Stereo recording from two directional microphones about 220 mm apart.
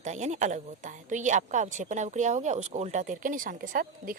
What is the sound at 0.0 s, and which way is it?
A woman's voice, 30° right (ahead or behind).